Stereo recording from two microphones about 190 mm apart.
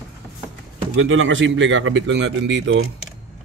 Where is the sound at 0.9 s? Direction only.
90° right.